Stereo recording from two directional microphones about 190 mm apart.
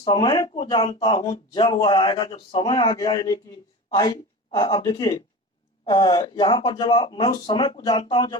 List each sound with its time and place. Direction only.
0.0 s speech: 25° left (ahead or behind)
4.5 s speech: 20° left (ahead or behind)